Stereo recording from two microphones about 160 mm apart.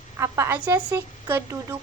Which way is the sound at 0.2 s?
15° right (ahead or behind).